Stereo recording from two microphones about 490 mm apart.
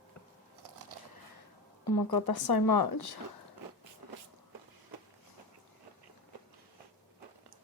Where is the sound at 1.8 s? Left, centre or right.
Left.